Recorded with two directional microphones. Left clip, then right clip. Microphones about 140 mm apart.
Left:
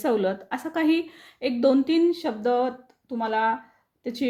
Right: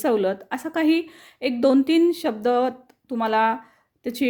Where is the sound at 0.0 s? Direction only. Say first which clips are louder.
Right 3 dB; 40° right (ahead or behind).